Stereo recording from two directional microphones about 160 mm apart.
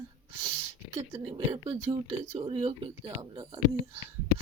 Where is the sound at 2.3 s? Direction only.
35° right (ahead or behind).